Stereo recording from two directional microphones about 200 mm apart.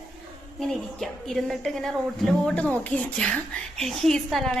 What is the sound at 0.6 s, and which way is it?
A woman's voice, centre (ahead or behind).